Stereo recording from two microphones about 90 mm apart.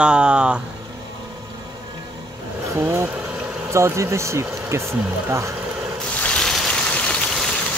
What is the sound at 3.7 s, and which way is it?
Speech, 30° right (ahead or behind).